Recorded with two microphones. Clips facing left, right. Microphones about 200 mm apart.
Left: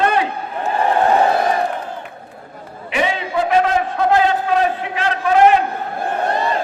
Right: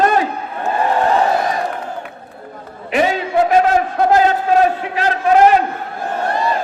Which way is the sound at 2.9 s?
40° right (ahead or behind).